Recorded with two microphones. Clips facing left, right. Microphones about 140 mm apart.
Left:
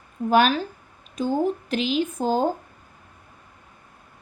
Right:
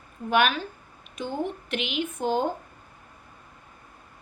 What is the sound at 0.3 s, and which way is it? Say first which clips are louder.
Speech: left 4 dB; 35° left (ahead or behind).